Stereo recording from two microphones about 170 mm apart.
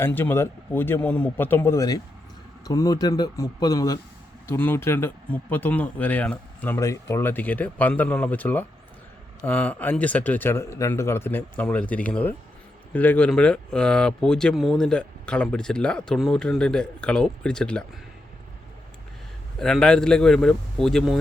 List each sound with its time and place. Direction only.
0.0 s speech: 10° left (ahead or behind)
19.5 s speech: 5° left (ahead or behind)